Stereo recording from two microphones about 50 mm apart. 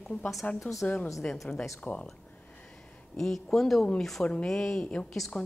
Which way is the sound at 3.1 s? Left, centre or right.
Centre.